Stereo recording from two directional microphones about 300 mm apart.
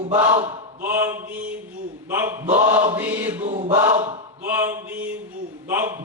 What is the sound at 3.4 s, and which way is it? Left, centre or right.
Mantra, centre.